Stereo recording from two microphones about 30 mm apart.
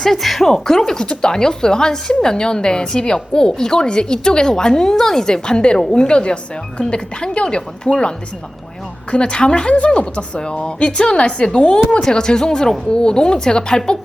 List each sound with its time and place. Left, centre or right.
0.0 s speech: centre
0.4 s a woman's voice: centre
4.9 s a woman's voice: centre
5.2 s a woman's voice: left
9.1 s a woman's voice: left